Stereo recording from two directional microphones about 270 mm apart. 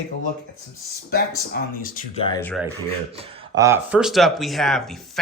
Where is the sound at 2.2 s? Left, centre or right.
Centre.